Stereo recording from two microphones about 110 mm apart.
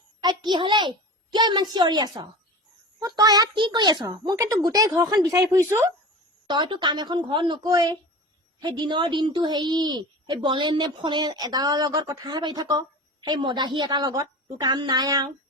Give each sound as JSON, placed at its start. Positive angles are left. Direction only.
{"t": 0.2, "sound": "a child's voice", "side_deg": -40}
{"t": 6.5, "sound": "a woman's voice", "side_deg": -45}